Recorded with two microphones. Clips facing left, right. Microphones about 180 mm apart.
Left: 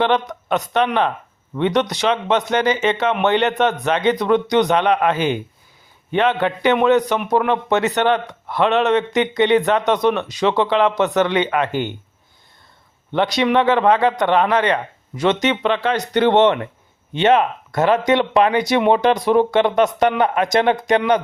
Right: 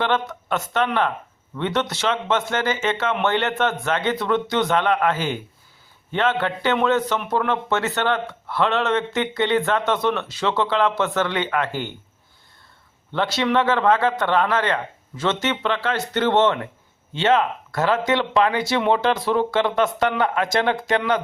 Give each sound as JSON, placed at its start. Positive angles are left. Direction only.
{"t": 0.0, "sound": "a man's voice", "side_deg": 20}
{"t": 13.1, "sound": "speech", "side_deg": 15}